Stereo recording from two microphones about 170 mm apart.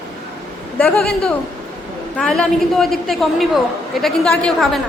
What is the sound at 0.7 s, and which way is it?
A woman's voice, 5° left (ahead or behind).